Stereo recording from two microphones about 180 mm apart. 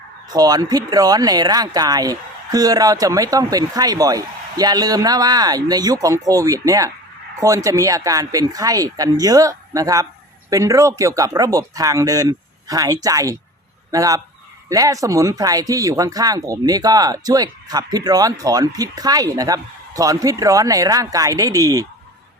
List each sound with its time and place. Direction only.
0.3 s speech: 20° right (ahead or behind)